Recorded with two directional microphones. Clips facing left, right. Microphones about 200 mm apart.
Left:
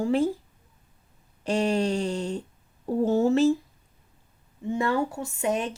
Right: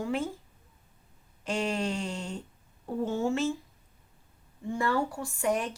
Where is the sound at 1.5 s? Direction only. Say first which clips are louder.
Left 6 dB; 35° left (ahead or behind).